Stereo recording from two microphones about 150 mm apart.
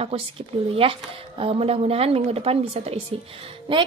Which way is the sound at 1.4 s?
40° right (ahead or behind).